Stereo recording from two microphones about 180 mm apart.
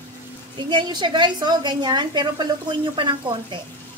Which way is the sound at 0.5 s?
25° right (ahead or behind).